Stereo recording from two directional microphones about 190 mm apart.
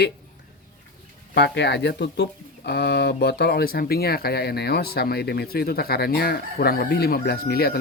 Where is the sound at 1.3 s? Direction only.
65° left (ahead or behind).